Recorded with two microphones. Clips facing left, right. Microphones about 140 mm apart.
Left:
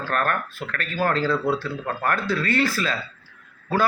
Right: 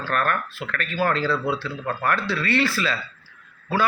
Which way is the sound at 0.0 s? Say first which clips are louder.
Even; 45° left (ahead or behind).